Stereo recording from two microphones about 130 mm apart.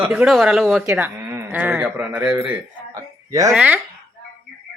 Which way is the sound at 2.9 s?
25° right (ahead or behind).